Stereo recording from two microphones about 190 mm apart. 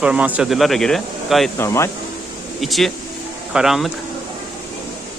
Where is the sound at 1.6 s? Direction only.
15° left (ahead or behind).